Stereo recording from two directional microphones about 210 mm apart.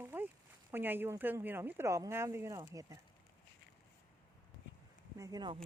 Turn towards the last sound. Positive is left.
turn(degrees=-20)  # may be behind; listen again after turning